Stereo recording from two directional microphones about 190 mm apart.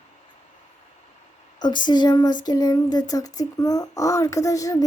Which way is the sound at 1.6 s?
25° left (ahead or behind).